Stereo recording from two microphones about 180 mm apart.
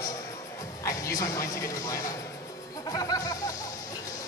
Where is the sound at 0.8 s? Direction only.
15° left (ahead or behind).